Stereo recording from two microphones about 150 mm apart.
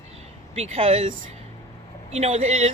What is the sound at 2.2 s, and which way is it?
Speech, 45° right (ahead or behind).